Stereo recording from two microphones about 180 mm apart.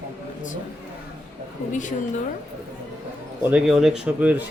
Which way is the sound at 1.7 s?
45° left (ahead or behind).